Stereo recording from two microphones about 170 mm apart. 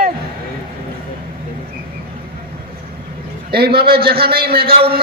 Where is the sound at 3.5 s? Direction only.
65° right (ahead or behind).